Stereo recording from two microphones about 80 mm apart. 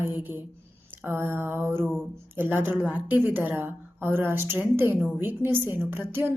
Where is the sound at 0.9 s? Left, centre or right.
Right.